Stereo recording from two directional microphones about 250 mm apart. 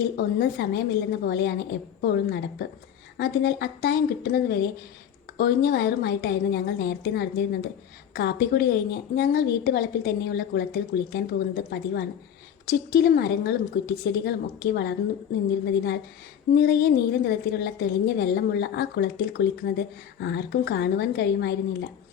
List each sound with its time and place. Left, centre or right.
0.0 s a woman's voice: left